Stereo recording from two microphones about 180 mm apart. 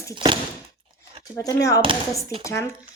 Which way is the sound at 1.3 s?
20° left (ahead or behind).